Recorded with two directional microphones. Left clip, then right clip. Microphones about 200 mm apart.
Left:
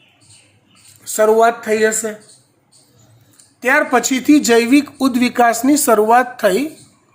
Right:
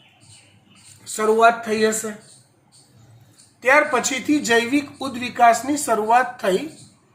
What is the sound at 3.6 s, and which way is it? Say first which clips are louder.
Speech: left 2 dB; 60° left (ahead or behind).